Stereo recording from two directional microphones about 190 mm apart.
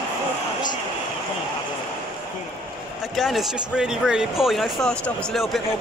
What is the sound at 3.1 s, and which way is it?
Speech, centre (ahead or behind).